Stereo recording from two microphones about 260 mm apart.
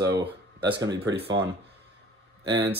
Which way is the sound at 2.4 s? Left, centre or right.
Centre.